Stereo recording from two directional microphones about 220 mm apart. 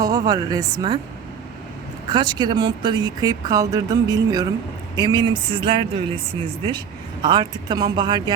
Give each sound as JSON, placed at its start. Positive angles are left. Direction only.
{"t": 0.0, "sound": "speech", "side_deg": -15}
{"t": 2.1, "sound": "speech", "side_deg": -20}